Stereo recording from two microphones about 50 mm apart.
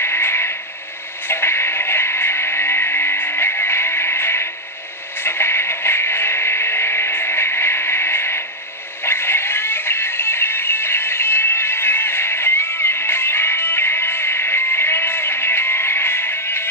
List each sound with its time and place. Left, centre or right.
0.0 s vehicle: left
1.2 s music: left